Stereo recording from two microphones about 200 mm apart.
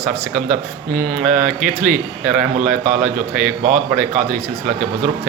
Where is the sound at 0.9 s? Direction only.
50° right (ahead or behind).